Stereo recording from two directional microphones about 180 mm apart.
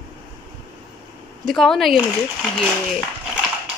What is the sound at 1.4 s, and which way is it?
Speech, centre (ahead or behind).